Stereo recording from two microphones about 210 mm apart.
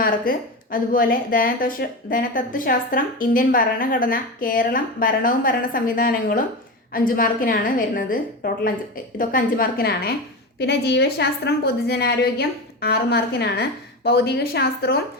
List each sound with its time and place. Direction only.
0.0 s a woman's voice: 40° left (ahead or behind)